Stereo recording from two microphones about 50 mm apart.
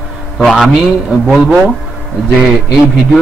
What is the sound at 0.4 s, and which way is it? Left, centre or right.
Speech, centre.